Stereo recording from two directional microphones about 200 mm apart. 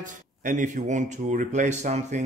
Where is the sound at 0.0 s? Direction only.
40° right (ahead or behind).